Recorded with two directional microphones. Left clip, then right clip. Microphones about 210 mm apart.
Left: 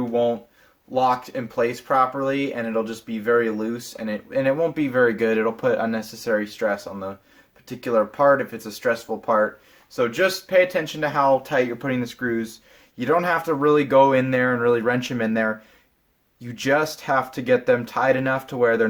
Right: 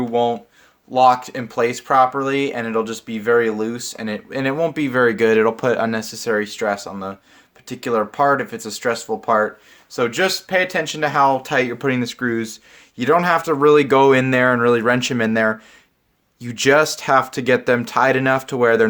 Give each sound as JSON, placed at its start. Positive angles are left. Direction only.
{"t": 0.1, "sound": "speech", "side_deg": -45}